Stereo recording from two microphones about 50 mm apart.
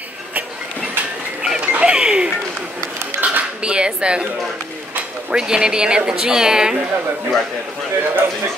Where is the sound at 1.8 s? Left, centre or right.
Centre.